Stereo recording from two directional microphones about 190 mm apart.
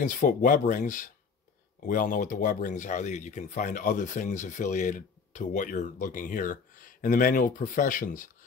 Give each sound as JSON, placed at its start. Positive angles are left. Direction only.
{"t": 0.0, "sound": "speech", "side_deg": 45}